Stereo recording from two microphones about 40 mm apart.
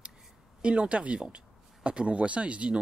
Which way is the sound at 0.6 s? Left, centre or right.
Right.